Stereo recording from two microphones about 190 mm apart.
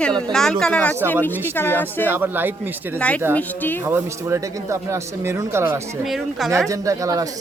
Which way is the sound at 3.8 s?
10° right (ahead or behind).